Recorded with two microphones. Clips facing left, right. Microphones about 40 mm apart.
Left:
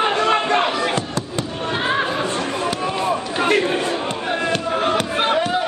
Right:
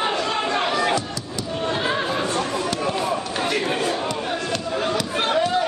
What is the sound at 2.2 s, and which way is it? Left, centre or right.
Chatter, left.